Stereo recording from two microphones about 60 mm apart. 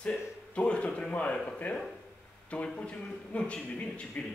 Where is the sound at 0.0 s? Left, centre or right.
Centre.